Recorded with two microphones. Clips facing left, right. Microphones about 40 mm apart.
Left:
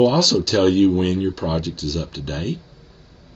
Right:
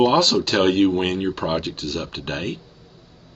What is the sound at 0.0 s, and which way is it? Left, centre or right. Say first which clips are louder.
Speech: even; right.